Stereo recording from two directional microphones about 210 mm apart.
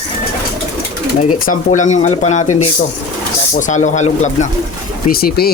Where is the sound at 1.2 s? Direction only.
35° left (ahead or behind).